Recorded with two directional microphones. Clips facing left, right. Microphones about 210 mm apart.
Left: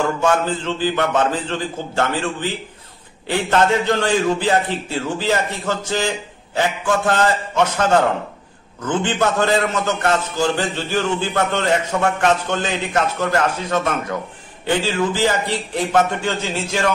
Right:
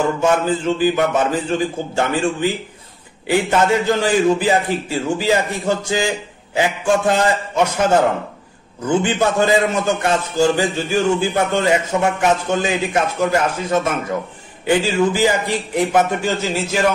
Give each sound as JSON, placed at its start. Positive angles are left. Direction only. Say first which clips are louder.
{"t": 0.2, "sound": "a man's voice", "louder": "right 2 dB", "side_deg": -10}